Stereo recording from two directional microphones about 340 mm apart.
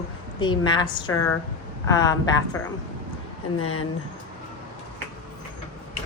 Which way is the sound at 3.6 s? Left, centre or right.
Left.